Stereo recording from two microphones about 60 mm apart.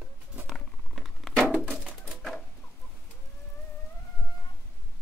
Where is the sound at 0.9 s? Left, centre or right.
Centre.